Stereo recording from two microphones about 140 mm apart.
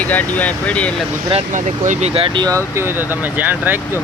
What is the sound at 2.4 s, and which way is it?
Speech, 20° right (ahead or behind).